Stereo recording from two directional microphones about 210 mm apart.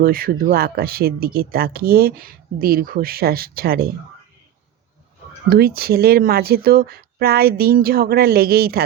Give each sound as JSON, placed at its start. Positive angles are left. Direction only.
{"t": 0.0, "sound": "speech", "side_deg": -45}
{"t": 5.5, "sound": "speech", "side_deg": -45}